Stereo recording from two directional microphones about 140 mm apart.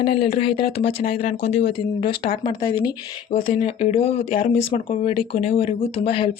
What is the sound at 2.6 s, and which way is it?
Speech, 25° left (ahead or behind).